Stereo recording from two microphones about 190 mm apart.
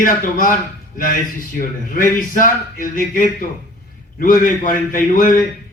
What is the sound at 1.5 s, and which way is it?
A man's voice, 45° left (ahead or behind).